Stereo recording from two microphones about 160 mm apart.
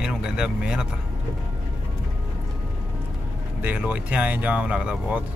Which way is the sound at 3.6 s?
10° right (ahead or behind).